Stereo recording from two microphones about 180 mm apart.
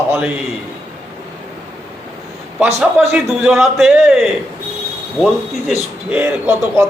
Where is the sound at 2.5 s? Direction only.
5° right (ahead or behind).